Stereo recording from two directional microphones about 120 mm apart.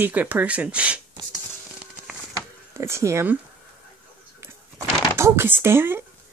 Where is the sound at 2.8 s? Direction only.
20° right (ahead or behind).